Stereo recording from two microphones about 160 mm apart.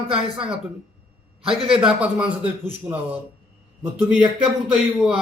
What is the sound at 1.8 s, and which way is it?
Speech, 5° right (ahead or behind).